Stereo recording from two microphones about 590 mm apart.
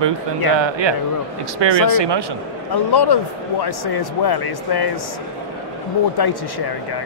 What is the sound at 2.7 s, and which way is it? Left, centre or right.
Speech, left.